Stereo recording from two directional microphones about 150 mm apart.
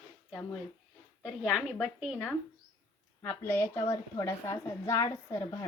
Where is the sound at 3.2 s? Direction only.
10° left (ahead or behind).